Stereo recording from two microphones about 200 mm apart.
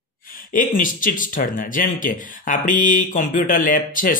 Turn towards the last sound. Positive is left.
turn(degrees=40)  # may be behind; listen again after turning